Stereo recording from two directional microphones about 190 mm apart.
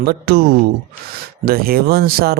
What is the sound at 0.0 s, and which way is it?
Speech, 55° right (ahead or behind).